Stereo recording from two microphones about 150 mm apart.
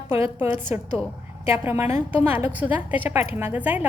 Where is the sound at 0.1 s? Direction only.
15° right (ahead or behind).